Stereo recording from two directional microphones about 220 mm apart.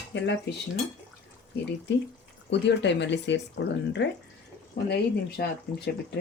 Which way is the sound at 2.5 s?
55° left (ahead or behind).